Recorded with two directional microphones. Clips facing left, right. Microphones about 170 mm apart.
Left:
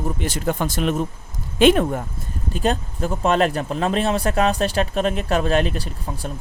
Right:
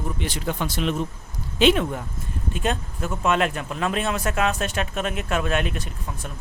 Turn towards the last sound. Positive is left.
turn(degrees=35)  # may be behind; listen again after turning